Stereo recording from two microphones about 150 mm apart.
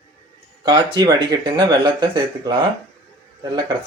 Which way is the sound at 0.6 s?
30° right (ahead or behind).